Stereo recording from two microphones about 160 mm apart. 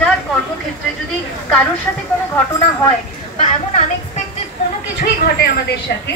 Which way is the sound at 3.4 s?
50° left (ahead or behind).